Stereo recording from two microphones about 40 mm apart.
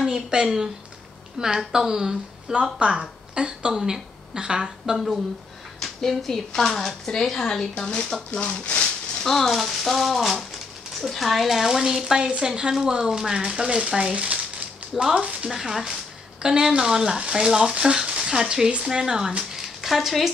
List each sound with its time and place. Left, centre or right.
0.0 s speech: centre
2.5 s a woman's voice: right
4.9 s speech: centre
5.8 s a woman's voice: centre
9.2 s speech: centre; by 15.5 s right
15.5 s speech: centre
19.9 s speech: centre